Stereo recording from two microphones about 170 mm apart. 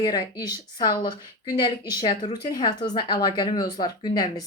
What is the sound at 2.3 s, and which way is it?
A woman's voice, 25° left (ahead or behind).